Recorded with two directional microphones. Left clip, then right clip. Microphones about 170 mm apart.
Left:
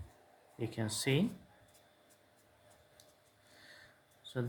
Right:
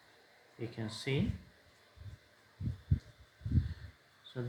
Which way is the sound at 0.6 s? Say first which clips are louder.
Left 4 dB; 50° left (ahead or behind).